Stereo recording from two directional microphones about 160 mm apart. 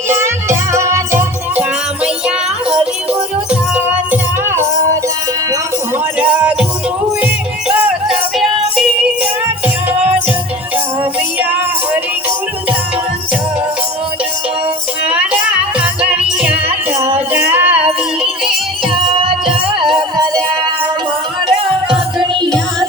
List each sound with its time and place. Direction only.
0.1 s music: 15° right (ahead or behind)
3.8 s music: 15° right (ahead or behind)
6.1 s music: 5° right (ahead or behind)
7.7 s music: 10° right (ahead or behind)
15.0 s music: 5° right (ahead or behind)
20.0 s music: 25° right (ahead or behind)
21.4 s music: 30° right (ahead or behind)